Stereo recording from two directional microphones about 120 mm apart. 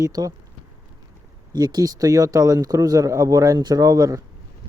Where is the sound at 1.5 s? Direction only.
30° right (ahead or behind).